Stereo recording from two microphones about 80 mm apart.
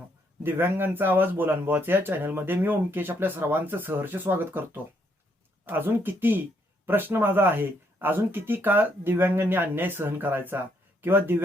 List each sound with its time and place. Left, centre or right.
0.4 s speech: right